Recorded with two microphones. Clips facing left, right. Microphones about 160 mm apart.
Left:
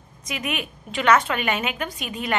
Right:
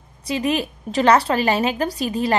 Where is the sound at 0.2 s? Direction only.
35° right (ahead or behind).